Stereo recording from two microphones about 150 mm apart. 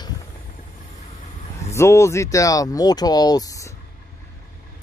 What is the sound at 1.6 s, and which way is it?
Speech, 20° left (ahead or behind).